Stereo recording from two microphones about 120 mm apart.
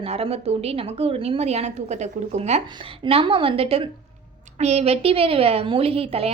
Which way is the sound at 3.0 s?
50° right (ahead or behind).